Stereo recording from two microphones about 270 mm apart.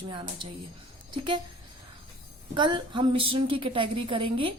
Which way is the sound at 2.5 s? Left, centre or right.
Centre.